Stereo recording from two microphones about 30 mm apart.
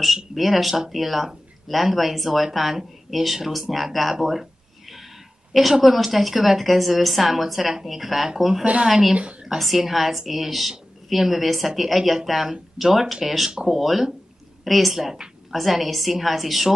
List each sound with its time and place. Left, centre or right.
0.3 s speech: centre
4.4 s a sound: centre
5.5 s speech: centre
9.1 s a woman's voice: right
9.6 s speech: centre